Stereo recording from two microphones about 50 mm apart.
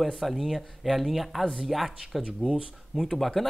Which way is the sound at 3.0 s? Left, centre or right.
Centre.